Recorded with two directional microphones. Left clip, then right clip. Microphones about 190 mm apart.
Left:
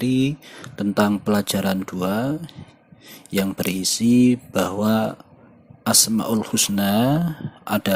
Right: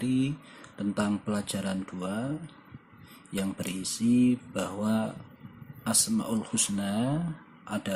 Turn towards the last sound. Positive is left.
turn(degrees=45)  # may be behind; listen again after turning